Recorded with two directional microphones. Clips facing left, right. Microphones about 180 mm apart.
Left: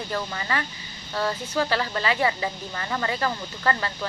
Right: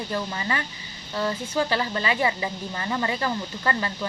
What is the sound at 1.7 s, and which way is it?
Speech, 20° right (ahead or behind).